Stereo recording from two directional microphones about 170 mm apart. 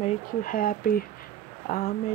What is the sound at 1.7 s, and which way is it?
Speech, 45° left (ahead or behind).